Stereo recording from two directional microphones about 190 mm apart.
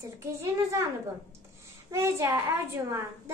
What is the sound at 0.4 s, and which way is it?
Speech, 15° right (ahead or behind).